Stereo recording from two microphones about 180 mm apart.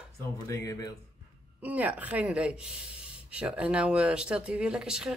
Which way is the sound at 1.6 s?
10° right (ahead or behind).